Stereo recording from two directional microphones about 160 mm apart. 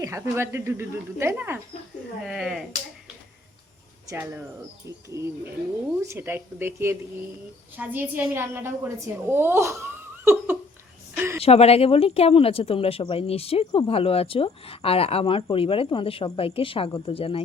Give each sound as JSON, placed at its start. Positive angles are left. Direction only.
{"t": 0.0, "sound": "a woman's voice", "side_deg": -15}
{"t": 2.2, "sound": "speech", "side_deg": -5}
{"t": 4.1, "sound": "a woman's voice", "side_deg": -15}
{"t": 4.9, "sound": "bird", "side_deg": -20}
{"t": 6.0, "sound": "a woman's voice", "side_deg": -15}
{"t": 11.4, "sound": "speech", "side_deg": 40}